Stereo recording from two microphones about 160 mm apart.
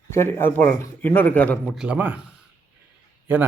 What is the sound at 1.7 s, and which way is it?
Speech, 5° right (ahead or behind).